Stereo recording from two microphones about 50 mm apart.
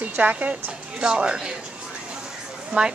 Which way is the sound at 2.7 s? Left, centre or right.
Right.